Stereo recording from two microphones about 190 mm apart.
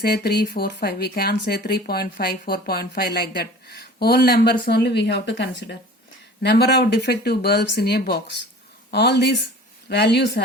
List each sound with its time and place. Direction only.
0.0 s speech: 55° left (ahead or behind)